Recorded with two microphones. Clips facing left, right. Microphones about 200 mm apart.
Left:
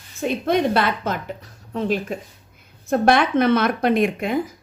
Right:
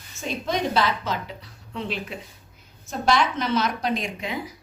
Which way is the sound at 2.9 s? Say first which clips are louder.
Left 6 dB; 60° left (ahead or behind).